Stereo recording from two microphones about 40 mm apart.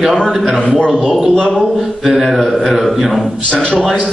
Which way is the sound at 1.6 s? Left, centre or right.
Centre.